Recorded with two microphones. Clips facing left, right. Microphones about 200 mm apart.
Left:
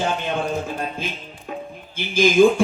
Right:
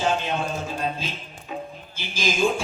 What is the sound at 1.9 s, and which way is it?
Speech, 55° left (ahead or behind).